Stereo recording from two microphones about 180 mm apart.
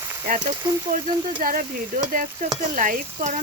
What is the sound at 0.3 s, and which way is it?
Speech, 45° right (ahead or behind).